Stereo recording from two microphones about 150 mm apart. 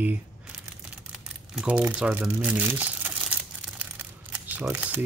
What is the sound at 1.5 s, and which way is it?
Crumpling, 5° right (ahead or behind).